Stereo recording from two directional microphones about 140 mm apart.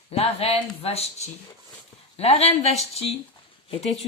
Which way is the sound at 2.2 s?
45° left (ahead or behind).